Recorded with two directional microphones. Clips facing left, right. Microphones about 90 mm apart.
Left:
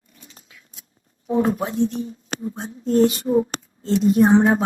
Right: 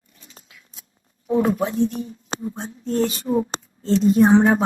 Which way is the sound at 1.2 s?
25° left (ahead or behind).